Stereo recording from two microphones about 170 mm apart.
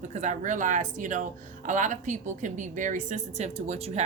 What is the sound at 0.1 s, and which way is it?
Speech, 45° right (ahead or behind).